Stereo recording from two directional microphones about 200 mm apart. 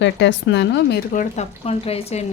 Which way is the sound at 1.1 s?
35° left (ahead or behind).